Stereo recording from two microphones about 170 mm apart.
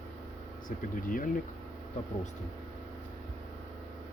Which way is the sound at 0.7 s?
50° left (ahead or behind).